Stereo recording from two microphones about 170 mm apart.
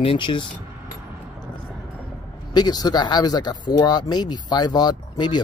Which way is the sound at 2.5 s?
25° left (ahead or behind).